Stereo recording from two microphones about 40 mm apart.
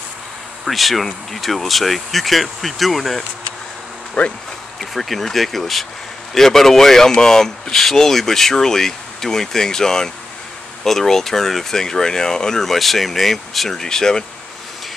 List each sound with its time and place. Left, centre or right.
0.7 s speech: centre
4.2 s speech: left
4.7 s speech: centre
13.7 s speech: centre